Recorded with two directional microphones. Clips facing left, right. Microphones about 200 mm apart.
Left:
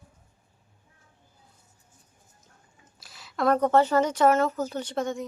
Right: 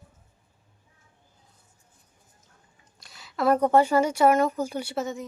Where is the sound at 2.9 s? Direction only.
Centre (ahead or behind).